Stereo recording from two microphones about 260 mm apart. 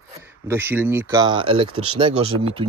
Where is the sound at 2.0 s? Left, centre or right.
Right.